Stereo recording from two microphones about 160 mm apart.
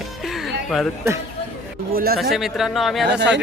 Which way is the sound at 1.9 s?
70° right (ahead or behind).